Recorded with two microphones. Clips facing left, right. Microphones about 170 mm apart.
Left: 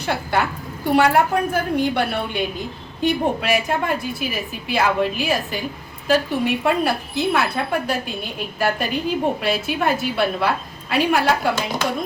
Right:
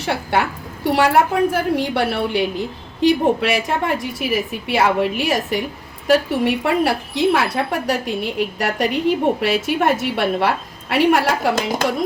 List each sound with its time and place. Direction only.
0.9 s a woman's voice: 85° right